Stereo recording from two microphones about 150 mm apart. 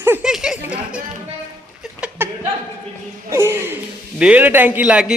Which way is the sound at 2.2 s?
15° right (ahead or behind).